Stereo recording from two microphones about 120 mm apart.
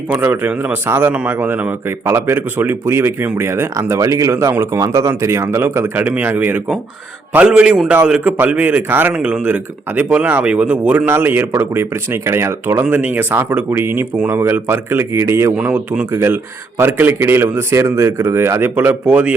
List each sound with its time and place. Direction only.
0.1 s a man's voice: 15° right (ahead or behind)